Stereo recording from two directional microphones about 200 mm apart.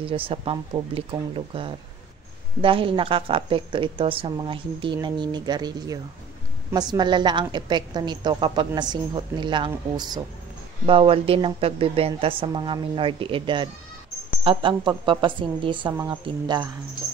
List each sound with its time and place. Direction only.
0.0 s a woman's voice: 25° right (ahead or behind)